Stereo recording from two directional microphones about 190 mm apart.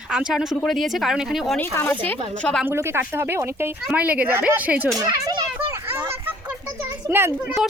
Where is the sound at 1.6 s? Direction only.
10° left (ahead or behind).